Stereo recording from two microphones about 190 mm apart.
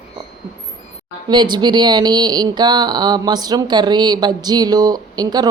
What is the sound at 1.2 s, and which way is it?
Speech, 25° right (ahead or behind).